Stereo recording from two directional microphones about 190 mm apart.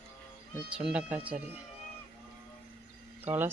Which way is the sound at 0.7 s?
5° right (ahead or behind).